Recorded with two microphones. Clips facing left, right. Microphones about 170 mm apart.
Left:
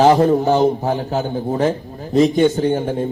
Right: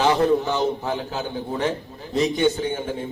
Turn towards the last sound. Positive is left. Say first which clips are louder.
# left 8 dB
turn(degrees=45)  # may be behind; listen again after turning